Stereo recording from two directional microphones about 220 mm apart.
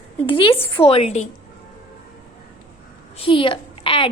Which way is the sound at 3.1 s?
25° left (ahead or behind).